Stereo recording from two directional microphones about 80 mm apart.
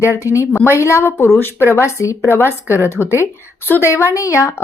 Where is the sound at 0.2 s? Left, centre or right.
Left.